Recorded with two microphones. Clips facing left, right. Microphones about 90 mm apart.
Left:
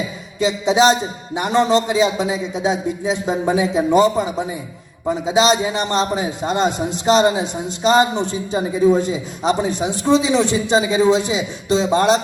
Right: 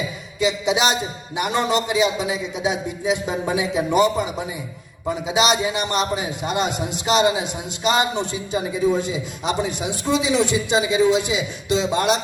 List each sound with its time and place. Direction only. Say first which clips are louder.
0.3 s a man's voice: left 4 dB; 35° left (ahead or behind)
8.3 s a man's voice: left 3 dB; 30° left (ahead or behind)